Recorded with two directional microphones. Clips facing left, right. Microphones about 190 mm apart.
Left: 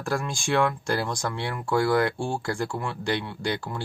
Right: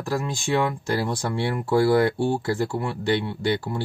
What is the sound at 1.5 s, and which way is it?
Speech, 30° right (ahead or behind).